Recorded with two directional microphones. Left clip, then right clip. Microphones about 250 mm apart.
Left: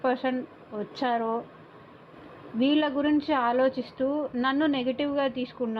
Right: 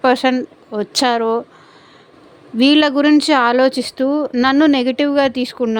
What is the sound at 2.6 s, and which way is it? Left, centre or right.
Speech, right.